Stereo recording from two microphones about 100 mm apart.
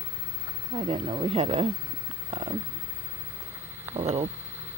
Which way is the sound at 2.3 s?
50° right (ahead or behind).